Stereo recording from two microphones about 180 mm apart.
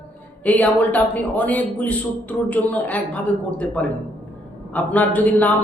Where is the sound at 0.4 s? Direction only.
10° left (ahead or behind).